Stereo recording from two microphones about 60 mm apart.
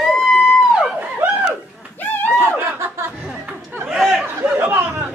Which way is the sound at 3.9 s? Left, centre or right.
Centre.